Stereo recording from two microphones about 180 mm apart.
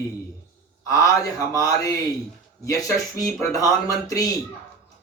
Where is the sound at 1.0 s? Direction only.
20° left (ahead or behind).